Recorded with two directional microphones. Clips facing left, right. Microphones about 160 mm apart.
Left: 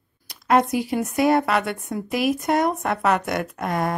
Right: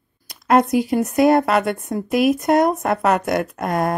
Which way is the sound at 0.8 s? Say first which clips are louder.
Right 5 dB; 45° right (ahead or behind).